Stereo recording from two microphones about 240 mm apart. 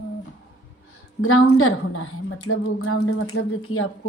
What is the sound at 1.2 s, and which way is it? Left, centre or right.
Speech, left.